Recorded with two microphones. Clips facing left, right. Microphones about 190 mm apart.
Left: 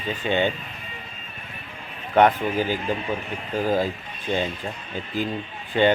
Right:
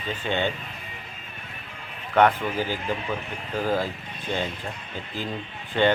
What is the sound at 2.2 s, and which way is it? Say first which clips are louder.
Speech: left 2 dB; 15° left (ahead or behind).